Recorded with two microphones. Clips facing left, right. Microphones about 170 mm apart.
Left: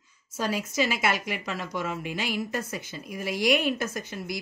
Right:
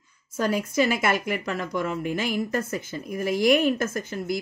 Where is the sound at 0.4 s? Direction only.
50° right (ahead or behind).